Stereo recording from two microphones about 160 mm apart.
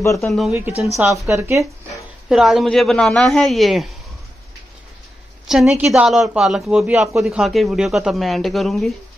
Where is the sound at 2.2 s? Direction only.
Centre (ahead or behind).